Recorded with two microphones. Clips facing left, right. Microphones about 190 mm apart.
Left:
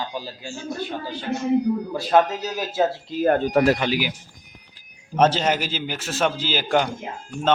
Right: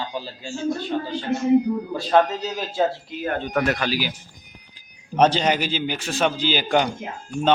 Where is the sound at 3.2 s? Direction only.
40° left (ahead or behind).